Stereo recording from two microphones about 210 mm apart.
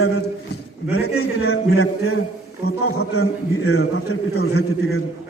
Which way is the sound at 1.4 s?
90° left.